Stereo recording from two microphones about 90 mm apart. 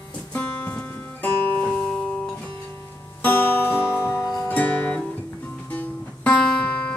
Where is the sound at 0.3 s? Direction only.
20° left (ahead or behind).